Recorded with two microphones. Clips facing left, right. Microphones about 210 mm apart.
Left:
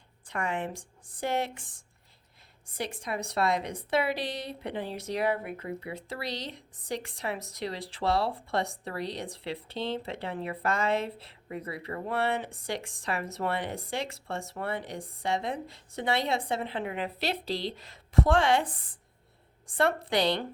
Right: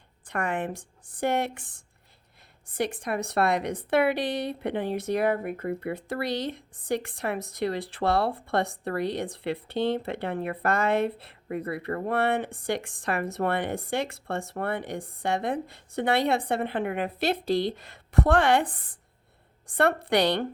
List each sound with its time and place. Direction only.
0.3 s a woman's voice: 55° right (ahead or behind)
2.7 s a woman's voice: 55° right (ahead or behind)